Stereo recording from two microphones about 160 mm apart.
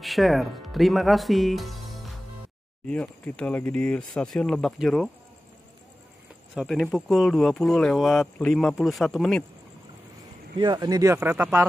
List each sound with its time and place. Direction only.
0.0 s speech: centre (ahead or behind)
6.5 s speech: centre (ahead or behind)
10.6 s speech: 25° right (ahead or behind)